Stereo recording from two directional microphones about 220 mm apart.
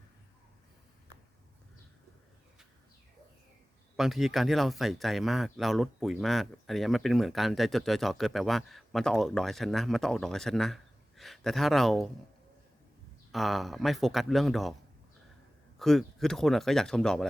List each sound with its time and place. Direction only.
3.9 s speech: centre (ahead or behind)
13.3 s speech: centre (ahead or behind)
15.8 s speech: centre (ahead or behind)